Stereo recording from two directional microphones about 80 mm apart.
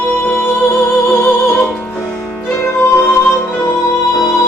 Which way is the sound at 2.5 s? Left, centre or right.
Left.